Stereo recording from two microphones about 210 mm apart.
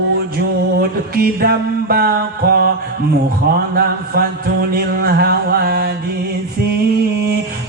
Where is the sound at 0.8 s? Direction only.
45° right (ahead or behind).